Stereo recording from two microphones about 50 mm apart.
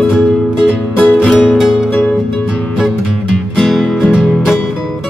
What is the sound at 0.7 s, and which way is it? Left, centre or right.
Music, left.